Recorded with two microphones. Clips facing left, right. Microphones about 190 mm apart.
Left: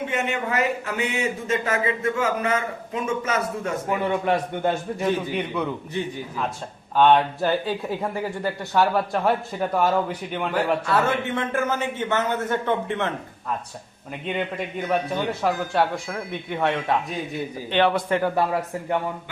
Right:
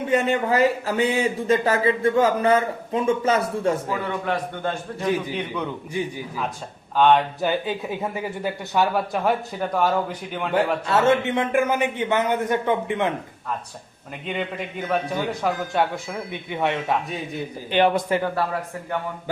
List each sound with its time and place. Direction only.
0.1 s speech: 35° right (ahead or behind)
3.8 s a man's voice: 20° left (ahead or behind)
5.0 s a man's voice: 10° right (ahead or behind)
5.3 s a man's voice: 10° left (ahead or behind)
5.9 s a man's voice: 10° right (ahead or behind)
10.8 s a man's voice: 25° right (ahead or behind)
14.8 s a man's voice: 10° right (ahead or behind)
15.3 s speech: 5° left (ahead or behind)
17.7 s a man's voice: 15° right (ahead or behind)